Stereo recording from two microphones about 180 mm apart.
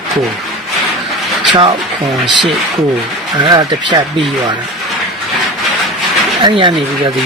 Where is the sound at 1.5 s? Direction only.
30° right (ahead or behind).